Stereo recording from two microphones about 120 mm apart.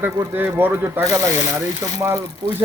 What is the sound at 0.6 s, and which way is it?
Speech, 15° right (ahead or behind).